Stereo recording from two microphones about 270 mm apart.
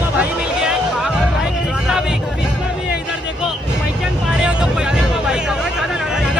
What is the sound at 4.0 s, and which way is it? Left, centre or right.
Vehicle, centre.